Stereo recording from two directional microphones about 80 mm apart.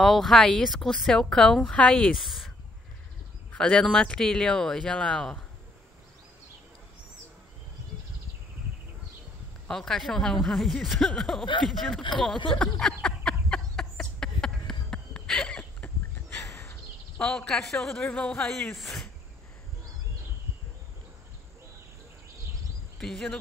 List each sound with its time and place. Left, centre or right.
0.0 s speech: centre
3.5 s speech: centre
9.7 s speech: centre
12.5 s a sound: centre
16.5 s a sound: left
17.2 s speech: centre
22.9 s speech: centre